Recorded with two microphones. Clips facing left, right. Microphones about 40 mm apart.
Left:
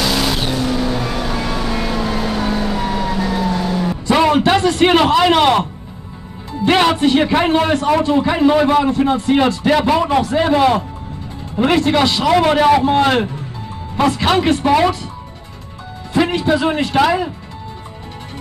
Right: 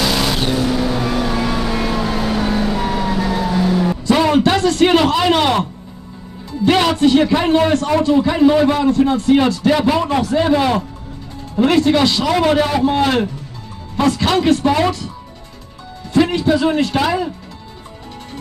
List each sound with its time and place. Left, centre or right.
0.0 s vehicle: centre
4.1 s a sound: centre
6.6 s a man's voice: left
16.1 s a man's voice: centre